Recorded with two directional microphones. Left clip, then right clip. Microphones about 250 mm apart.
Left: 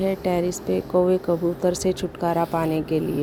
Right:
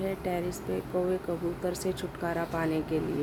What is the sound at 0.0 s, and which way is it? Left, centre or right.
Speech, left.